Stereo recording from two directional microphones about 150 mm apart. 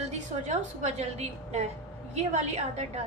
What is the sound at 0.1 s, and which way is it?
A woman's voice, 50° right (ahead or behind).